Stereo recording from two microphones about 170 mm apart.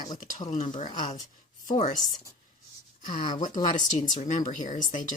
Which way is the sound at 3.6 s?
50° left (ahead or behind).